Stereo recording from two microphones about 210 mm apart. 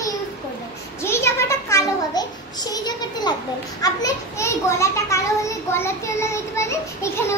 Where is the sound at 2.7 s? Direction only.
20° left (ahead or behind).